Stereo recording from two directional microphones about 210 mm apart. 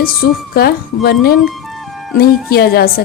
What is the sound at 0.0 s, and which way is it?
A woman's voice, 45° left (ahead or behind).